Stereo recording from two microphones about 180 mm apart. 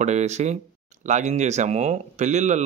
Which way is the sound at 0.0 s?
40° right (ahead or behind).